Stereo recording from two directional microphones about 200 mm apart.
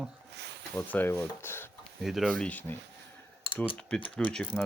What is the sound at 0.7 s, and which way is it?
Speech, 10° left (ahead or behind).